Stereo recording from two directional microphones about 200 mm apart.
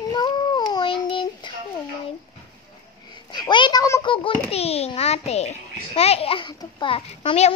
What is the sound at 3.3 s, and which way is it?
A child's voice, 20° left (ahead or behind).